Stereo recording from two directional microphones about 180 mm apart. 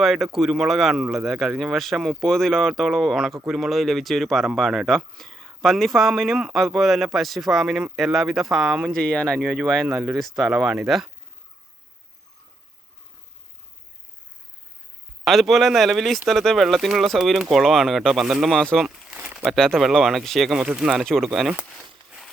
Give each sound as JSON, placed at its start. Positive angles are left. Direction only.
{"t": 0.0, "sound": "speech", "side_deg": 0}
{"t": 15.2, "sound": "speech", "side_deg": 0}